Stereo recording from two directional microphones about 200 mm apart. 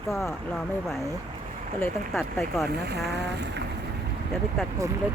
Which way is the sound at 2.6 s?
55° right (ahead or behind).